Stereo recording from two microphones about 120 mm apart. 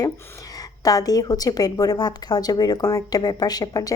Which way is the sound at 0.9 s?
30° left (ahead or behind).